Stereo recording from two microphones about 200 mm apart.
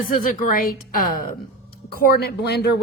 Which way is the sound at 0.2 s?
45° left (ahead or behind).